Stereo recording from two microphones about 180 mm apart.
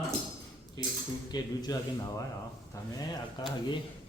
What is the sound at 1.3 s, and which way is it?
Speech, 20° left (ahead or behind).